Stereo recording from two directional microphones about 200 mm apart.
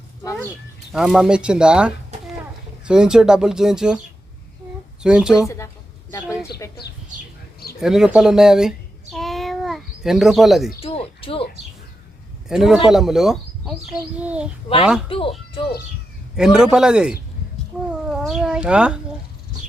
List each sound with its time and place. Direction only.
0.9 s speech: 5° right (ahead or behind)
5.0 s speech: 5° right (ahead or behind)
5.4 s a sound: 15° left (ahead or behind)
6.6 s speech: 15° left (ahead or behind)
7.8 s a sound: 5° right (ahead or behind)
10.8 s a woman's voice: 30° left (ahead or behind)
12.5 s a child's voice: 5° right (ahead or behind)
15.1 s speech: 25° left (ahead or behind)
16.3 s speech: 5° right (ahead or behind)
17.7 s cat: 5° right (ahead or behind)
18.1 s speech: 5° right (ahead or behind)